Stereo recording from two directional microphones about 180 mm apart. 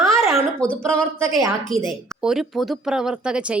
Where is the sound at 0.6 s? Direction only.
5° left (ahead or behind).